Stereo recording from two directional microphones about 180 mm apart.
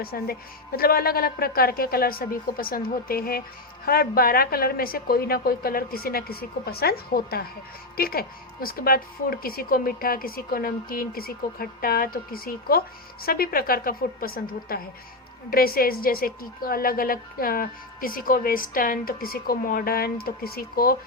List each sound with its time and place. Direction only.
0.0 s a woman's voice: 55° left (ahead or behind)